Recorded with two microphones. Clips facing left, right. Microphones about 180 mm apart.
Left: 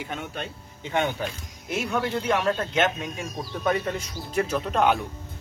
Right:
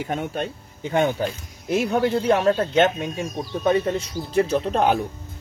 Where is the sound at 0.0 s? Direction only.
40° right (ahead or behind).